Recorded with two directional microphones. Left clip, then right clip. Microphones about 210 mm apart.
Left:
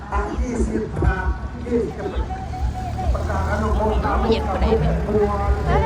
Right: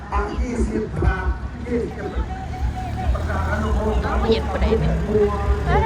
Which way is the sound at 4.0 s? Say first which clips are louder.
Left 1 dB; 15° left (ahead or behind).